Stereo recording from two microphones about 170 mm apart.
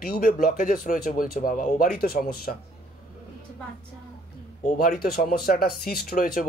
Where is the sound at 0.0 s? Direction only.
55° left (ahead or behind).